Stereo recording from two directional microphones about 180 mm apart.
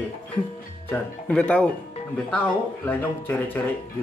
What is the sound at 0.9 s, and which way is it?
Speech, 5° left (ahead or behind).